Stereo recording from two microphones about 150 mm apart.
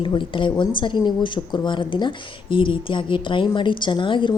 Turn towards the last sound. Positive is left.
turn(degrees=35)  # may be behind; listen again after turning